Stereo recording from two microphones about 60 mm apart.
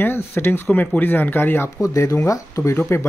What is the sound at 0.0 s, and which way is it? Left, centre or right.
Speech, left.